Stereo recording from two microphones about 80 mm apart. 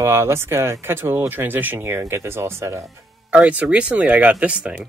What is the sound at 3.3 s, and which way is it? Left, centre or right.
Speech, centre.